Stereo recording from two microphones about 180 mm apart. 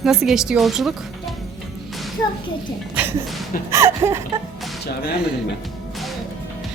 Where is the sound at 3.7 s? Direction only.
15° right (ahead or behind).